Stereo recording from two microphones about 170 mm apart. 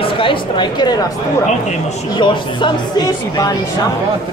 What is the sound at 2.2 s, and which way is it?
Speech, 25° left (ahead or behind).